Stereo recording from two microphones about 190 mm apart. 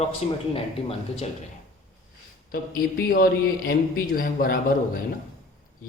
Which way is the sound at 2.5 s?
50° left (ahead or behind).